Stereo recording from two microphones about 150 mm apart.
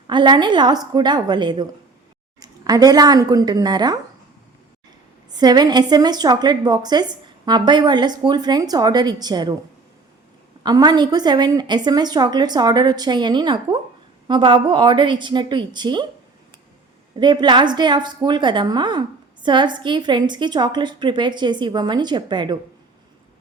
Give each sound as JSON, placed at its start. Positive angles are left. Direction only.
{"t": 0.1, "sound": "a woman's voice", "side_deg": -30}
{"t": 5.3, "sound": "a woman's voice", "side_deg": -25}
{"t": 10.6, "sound": "a woman's voice", "side_deg": -25}
{"t": 17.2, "sound": "a woman's voice", "side_deg": -30}